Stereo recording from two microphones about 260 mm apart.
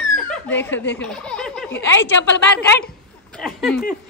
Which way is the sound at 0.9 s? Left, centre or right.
Centre.